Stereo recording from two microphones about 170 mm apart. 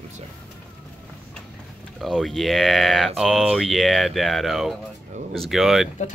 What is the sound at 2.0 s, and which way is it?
Speech, centre (ahead or behind).